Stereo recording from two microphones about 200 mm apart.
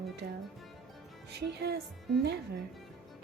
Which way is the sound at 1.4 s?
55° right (ahead or behind).